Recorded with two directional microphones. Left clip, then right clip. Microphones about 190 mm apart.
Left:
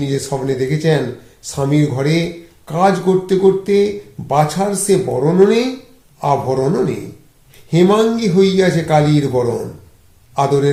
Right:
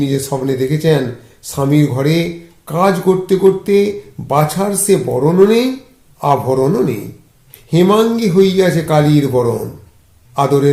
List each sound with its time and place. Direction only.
0.0 s speech: 20° right (ahead or behind)